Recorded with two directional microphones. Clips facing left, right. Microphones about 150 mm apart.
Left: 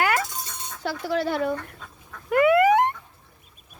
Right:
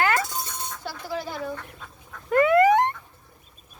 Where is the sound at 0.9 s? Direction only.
70° left (ahead or behind).